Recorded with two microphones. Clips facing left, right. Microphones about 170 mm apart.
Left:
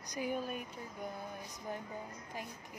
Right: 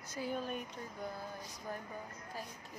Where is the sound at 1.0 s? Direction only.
20° left (ahead or behind).